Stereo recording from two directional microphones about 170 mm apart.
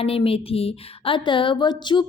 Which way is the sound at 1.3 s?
30° left (ahead or behind).